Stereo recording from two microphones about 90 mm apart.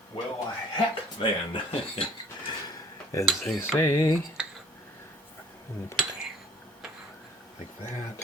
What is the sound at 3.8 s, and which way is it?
Dishes, 25° left (ahead or behind).